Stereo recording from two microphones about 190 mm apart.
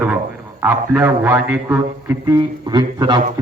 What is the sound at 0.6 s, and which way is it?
A man's voice, 10° right (ahead or behind).